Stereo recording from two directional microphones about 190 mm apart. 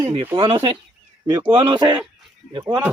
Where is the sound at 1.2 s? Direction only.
25° right (ahead or behind).